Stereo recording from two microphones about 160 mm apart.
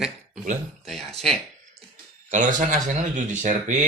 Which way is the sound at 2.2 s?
50° right (ahead or behind).